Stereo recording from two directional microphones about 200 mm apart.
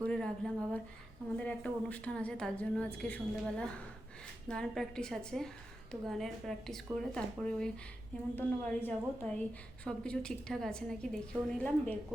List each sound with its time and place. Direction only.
0.0 s a sound: 5° left (ahead or behind)
1.4 s a woman's voice: 5° left (ahead or behind)
4.4 s a woman's voice: 5° left (ahead or behind)